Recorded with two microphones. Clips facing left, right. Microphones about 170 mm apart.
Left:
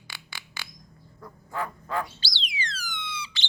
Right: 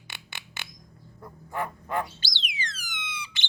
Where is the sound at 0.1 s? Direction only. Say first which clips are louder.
Even; 25° right (ahead or behind).